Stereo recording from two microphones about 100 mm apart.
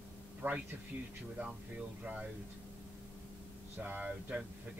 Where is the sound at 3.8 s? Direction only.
15° right (ahead or behind).